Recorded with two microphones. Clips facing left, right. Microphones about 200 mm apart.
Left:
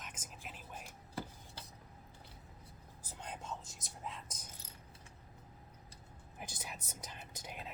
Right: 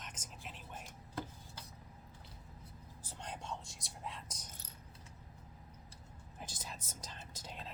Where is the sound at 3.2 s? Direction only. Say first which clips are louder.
Even; 5° left (ahead or behind).